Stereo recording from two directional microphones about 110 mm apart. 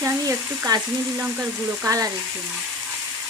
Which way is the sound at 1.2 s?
20° right (ahead or behind).